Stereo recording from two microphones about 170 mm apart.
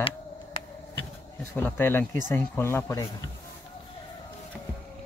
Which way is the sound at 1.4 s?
10° left (ahead or behind).